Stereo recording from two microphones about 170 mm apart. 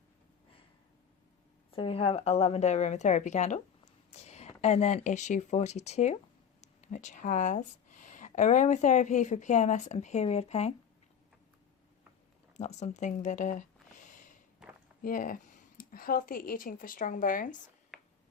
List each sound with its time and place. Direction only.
1.7 s a woman's voice: 35° left (ahead or behind)
4.1 s a sound: 40° left (ahead or behind)
4.6 s a woman's voice: 40° left (ahead or behind)
12.5 s speech: 40° left (ahead or behind)
14.0 s snort: 50° left (ahead or behind)
15.0 s speech: 55° left (ahead or behind)